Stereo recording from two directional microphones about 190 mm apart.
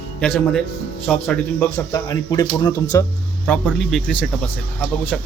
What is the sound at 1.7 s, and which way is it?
Speech, 20° left (ahead or behind).